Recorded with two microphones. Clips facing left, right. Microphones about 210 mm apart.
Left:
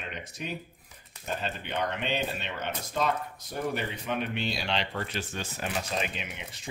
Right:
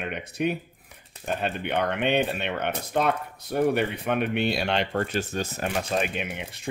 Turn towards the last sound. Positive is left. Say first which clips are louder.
# right 8 dB
turn(degrees=-55)  # may be behind; listen again after turning